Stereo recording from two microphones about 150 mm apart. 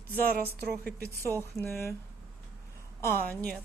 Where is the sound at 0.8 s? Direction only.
15° left (ahead or behind).